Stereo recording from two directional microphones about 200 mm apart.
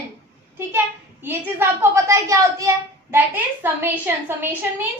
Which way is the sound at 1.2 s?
10° right (ahead or behind).